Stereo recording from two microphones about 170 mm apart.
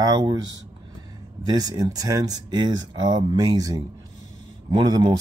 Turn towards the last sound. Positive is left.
turn(degrees=-25)  # may be behind; listen again after turning